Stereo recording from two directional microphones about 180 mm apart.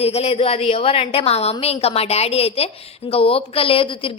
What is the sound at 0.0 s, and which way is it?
A woman's voice, 35° left (ahead or behind).